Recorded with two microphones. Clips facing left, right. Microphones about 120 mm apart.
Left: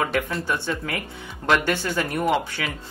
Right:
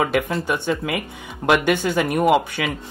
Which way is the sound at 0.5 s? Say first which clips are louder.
Right 4 dB; 15° right (ahead or behind).